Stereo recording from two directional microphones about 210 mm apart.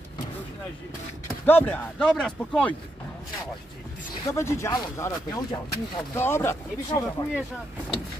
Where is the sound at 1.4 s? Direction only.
10° left (ahead or behind).